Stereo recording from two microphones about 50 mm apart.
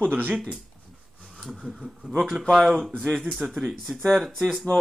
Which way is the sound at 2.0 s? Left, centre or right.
Centre.